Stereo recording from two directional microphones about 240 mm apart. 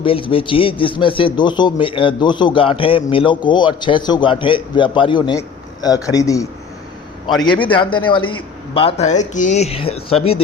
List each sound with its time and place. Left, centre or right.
0.0 s a man's voice: left
7.6 s a man's voice: left